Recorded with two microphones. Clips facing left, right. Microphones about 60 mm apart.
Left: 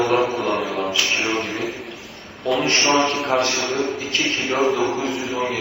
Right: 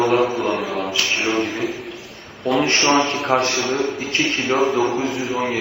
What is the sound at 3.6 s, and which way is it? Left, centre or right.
Speech, right.